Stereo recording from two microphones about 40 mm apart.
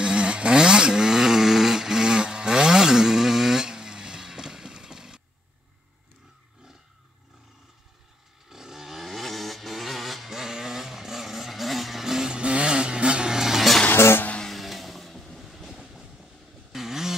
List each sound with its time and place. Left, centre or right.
0.0 s vehicle: right
8.5 s motorcycle: centre
12.3 s vehicle: right
13.9 s music: left
14.5 s vehicle: centre
15.4 s train: centre
16.7 s vehicle: centre